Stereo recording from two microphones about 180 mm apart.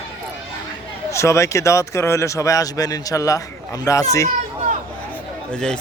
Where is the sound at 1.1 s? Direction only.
15° left (ahead or behind).